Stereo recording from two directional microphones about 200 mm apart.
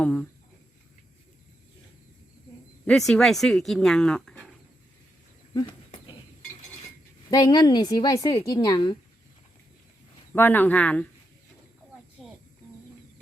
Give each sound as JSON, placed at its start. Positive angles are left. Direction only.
{"t": 0.0, "sound": "speech", "side_deg": 5}
{"t": 2.8, "sound": "speech", "side_deg": 5}
{"t": 5.5, "sound": "cricket", "side_deg": 25}
{"t": 7.3, "sound": "a woman's voice", "side_deg": 20}
{"t": 10.3, "sound": "speech", "side_deg": 10}
{"t": 12.2, "sound": "cricket", "side_deg": 0}